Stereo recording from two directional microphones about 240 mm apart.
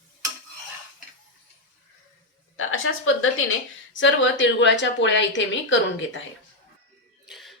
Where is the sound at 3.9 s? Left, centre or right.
Left.